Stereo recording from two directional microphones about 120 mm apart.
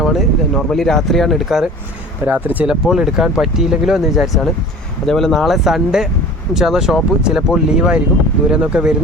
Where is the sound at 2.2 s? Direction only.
10° right (ahead or behind).